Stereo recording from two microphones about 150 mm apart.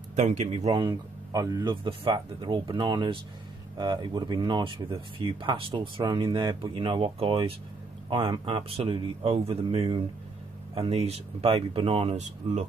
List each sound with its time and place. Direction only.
0.1 s speech: 50° right (ahead or behind)
0.5 s speech: 40° right (ahead or behind)
1.3 s speech: 25° right (ahead or behind); by 12.6 s 45° right (ahead or behind)